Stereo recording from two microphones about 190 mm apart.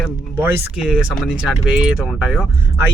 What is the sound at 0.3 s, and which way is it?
Speech, 15° right (ahead or behind).